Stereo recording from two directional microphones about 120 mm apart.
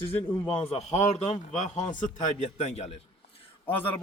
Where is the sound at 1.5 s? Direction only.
90° left; by 2.9 s 70° left (ahead or behind).